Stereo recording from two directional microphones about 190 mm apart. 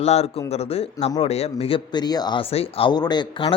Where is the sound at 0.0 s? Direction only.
35° left (ahead or behind).